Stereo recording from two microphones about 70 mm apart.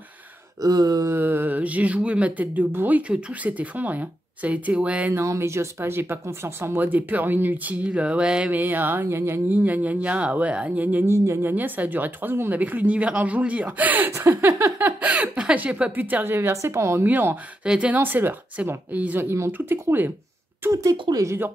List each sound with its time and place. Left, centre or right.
0.6 s a sound: right
1.1 s speech: right
5.1 s speech: right; by 8.5 s centre
8.5 s speech: right
11.1 s speech: right
11.5 s speech: right
17.0 s speech: right
17.6 s speech: centre
19.1 s speech: right
20.7 s speech: right